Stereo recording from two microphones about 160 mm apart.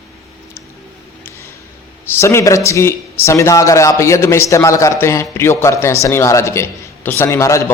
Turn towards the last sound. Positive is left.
turn(degrees=20)  # may be behind; listen again after turning